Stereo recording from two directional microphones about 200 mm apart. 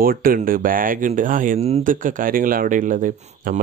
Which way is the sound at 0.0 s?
45° right (ahead or behind).